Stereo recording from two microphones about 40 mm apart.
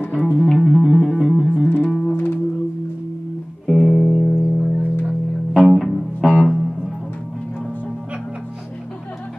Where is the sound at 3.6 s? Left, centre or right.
Centre.